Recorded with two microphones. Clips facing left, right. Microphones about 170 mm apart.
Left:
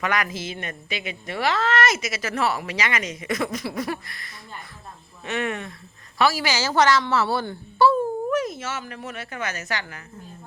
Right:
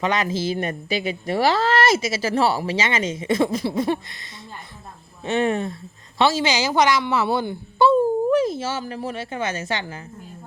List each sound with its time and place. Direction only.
0.0 s speech: 25° right (ahead or behind)
5.2 s a woman's voice: 30° right (ahead or behind)
8.3 s speech: 30° right (ahead or behind)